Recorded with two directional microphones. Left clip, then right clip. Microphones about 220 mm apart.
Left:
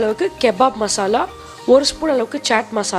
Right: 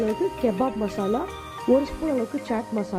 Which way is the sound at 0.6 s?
20° left (ahead or behind).